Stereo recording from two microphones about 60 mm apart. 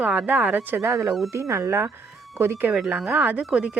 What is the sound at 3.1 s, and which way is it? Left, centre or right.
Speech, right.